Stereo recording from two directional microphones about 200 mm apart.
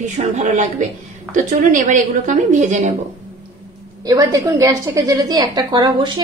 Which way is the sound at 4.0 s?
20° right (ahead or behind).